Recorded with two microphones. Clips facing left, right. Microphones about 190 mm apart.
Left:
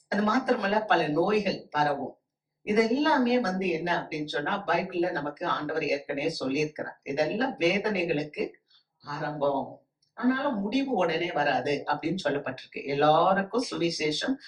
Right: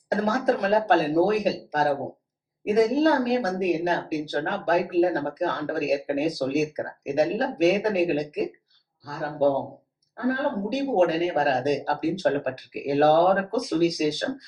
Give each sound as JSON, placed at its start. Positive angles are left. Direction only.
{"t": 0.1, "sound": "a woman's voice", "side_deg": -45}
{"t": 10.2, "sound": "a woman's voice", "side_deg": -45}